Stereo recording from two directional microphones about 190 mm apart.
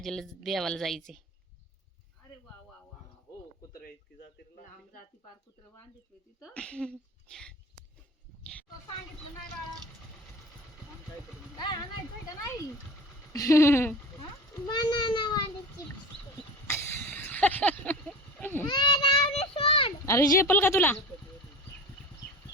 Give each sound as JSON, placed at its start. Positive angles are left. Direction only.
{"t": 0.0, "sound": "speech", "side_deg": 0}
{"t": 6.4, "sound": "speech", "side_deg": 5}
{"t": 13.3, "sound": "a child's voice", "side_deg": 15}
{"t": 16.6, "sound": "a sound", "side_deg": 15}
{"t": 18.7, "sound": "child singing", "side_deg": 25}
{"t": 20.1, "sound": "speech", "side_deg": 15}